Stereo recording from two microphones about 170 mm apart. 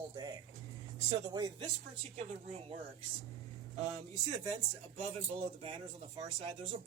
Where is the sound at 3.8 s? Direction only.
40° right (ahead or behind).